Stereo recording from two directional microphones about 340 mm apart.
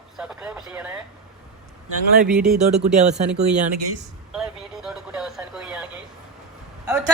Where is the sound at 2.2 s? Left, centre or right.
Centre.